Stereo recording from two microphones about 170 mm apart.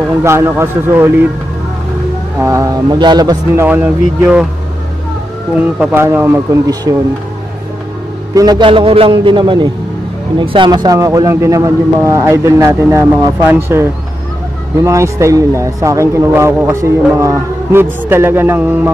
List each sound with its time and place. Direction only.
0.2 s speech: 15° right (ahead or behind)
2.4 s a man's voice: 20° right (ahead or behind)
3.6 s speech: 10° right (ahead or behind)
5.8 s speech: 10° right (ahead or behind)
8.4 s a man's voice: 25° right (ahead or behind)